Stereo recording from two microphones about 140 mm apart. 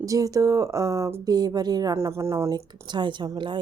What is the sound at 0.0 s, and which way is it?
Speech, 25° right (ahead or behind).